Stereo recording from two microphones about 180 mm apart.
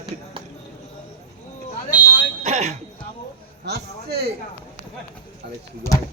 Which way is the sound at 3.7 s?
65° right (ahead or behind).